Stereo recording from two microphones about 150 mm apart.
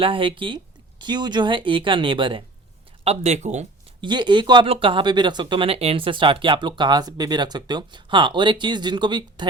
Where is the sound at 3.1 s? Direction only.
50° right (ahead or behind).